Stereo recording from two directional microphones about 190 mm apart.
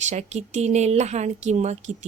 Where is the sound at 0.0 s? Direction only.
35° right (ahead or behind).